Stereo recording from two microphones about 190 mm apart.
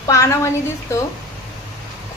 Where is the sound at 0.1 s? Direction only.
15° left (ahead or behind).